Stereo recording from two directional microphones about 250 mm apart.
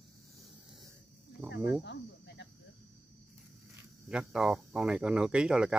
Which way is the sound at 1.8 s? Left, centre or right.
Left.